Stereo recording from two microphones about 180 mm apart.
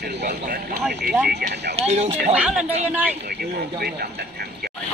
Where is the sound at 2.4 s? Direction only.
5° right (ahead or behind).